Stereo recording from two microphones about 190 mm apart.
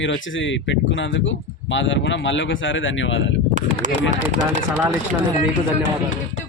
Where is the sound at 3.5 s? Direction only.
40° right (ahead or behind).